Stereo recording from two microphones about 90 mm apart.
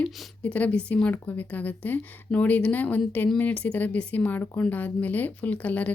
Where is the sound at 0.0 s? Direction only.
15° left (ahead or behind).